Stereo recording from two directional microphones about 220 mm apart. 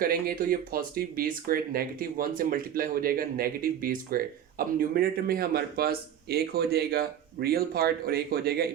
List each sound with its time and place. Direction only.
0.0 s speech: 40° right (ahead or behind)